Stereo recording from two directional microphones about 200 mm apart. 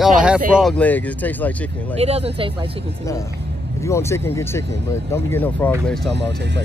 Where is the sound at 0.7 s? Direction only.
10° left (ahead or behind).